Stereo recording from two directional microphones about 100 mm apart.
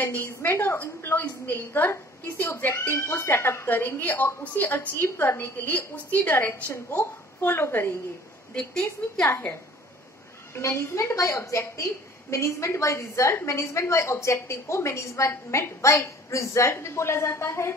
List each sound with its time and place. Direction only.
0.0 s a woman's voice: 20° left (ahead or behind)
8.5 s a woman's voice: 10° left (ahead or behind)
9.2 s a woman's voice: 25° left (ahead or behind)